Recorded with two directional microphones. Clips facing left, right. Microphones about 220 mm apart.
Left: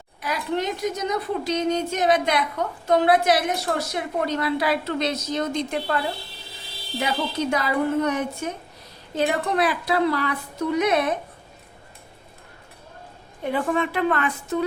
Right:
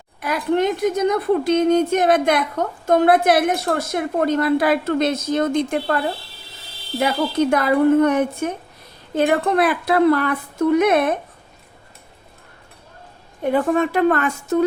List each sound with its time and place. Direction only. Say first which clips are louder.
0.2 s a woman's voice: right 7 dB; 55° right (ahead or behind)
7.0 s a woman's voice: right 7 dB; 55° right (ahead or behind)
13.4 s a woman's voice: right 6 dB; 45° right (ahead or behind)